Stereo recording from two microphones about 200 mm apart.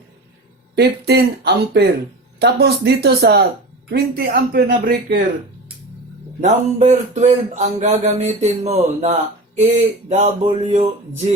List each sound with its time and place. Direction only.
0.8 s speech: 55° right (ahead or behind)
6.4 s speech: 35° right (ahead or behind)